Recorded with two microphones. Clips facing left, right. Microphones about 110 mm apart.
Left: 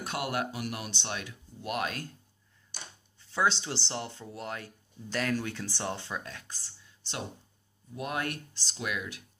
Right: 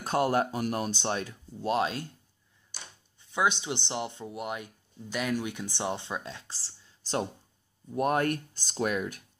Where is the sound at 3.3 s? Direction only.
15° right (ahead or behind).